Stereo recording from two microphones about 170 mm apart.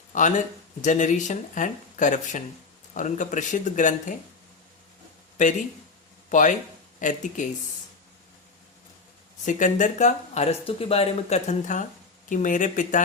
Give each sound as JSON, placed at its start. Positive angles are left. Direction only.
{"t": 0.1, "sound": "speech", "side_deg": 45}
{"t": 5.4, "sound": "speech", "side_deg": 45}
{"t": 9.5, "sound": "speech", "side_deg": 45}